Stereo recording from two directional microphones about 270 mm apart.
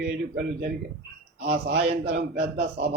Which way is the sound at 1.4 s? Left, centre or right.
Right.